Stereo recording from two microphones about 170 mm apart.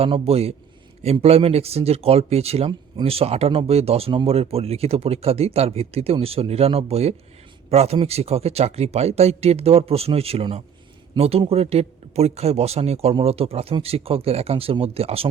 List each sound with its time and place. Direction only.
0.0 s speech: 35° right (ahead or behind)